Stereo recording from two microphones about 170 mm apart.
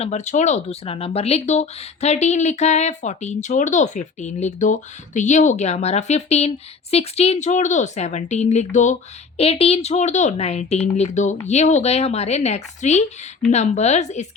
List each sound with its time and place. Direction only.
0.0 s speech: 40° left (ahead or behind)